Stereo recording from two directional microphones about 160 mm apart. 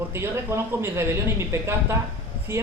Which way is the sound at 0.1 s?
15° right (ahead or behind).